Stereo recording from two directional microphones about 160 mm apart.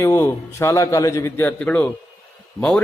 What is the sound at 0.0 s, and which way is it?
A man's voice, 15° left (ahead or behind).